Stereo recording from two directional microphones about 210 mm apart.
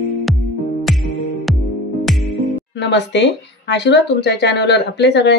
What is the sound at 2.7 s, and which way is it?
Speech, 55° left (ahead or behind).